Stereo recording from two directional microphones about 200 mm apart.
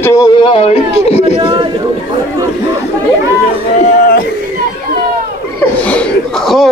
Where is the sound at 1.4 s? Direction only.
25° right (ahead or behind).